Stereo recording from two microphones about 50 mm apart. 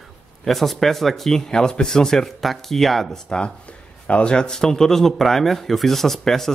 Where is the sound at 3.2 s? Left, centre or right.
Centre.